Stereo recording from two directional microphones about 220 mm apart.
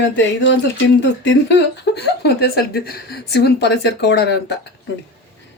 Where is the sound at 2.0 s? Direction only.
50° left (ahead or behind).